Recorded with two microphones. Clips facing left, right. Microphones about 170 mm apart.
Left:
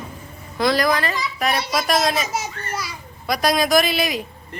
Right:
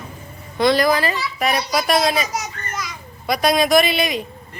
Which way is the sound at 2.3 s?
30° left (ahead or behind).